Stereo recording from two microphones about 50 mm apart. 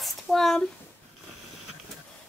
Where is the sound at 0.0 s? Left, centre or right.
Centre.